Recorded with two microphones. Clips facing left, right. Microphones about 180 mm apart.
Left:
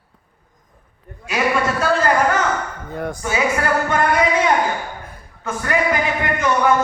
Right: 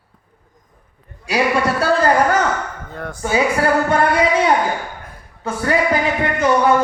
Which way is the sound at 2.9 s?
15° left (ahead or behind).